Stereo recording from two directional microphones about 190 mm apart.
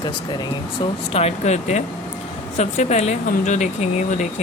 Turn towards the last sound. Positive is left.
turn(degrees=40)  # may be behind; listen again after turning